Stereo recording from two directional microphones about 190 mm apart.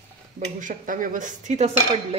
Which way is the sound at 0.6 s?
45° right (ahead or behind).